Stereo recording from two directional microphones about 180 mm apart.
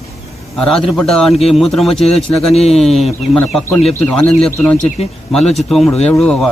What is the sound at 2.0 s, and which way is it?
Speech, 35° left (ahead or behind).